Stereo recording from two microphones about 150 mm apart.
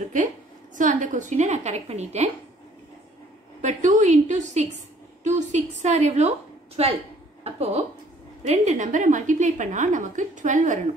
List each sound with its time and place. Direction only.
0.7 s a woman's voice: 60° right (ahead or behind)
3.6 s a woman's voice: 55° right (ahead or behind)